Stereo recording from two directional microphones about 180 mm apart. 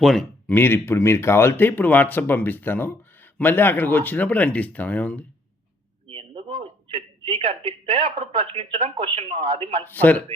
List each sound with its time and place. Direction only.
0.0 s speech: centre (ahead or behind)
0.5 s speech: 10° left (ahead or behind)
6.1 s a man's voice: 30° right (ahead or behind)
9.8 s speech: 10° left (ahead or behind)